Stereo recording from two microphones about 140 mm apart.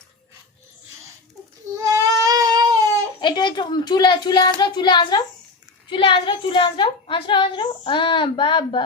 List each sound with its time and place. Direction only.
1.8 s baby cry: 25° right (ahead or behind)
3.2 s a woman's voice: 30° left (ahead or behind)